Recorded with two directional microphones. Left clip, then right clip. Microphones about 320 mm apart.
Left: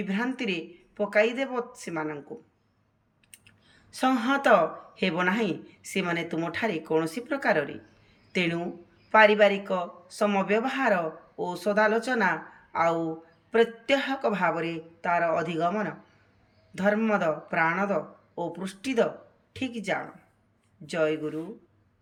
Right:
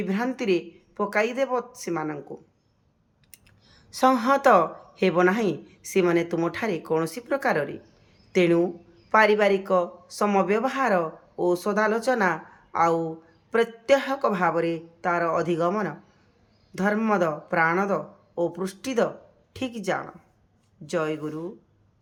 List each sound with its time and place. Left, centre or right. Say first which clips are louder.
0.0 s speech: right 3 dB; centre
3.3 s a woman's voice: even; centre